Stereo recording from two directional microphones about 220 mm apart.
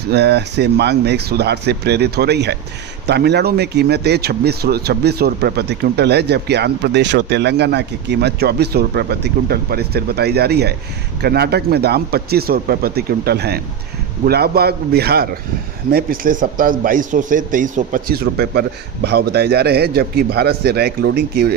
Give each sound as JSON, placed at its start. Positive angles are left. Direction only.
{"t": 0.1, "sound": "a man's voice", "side_deg": -50}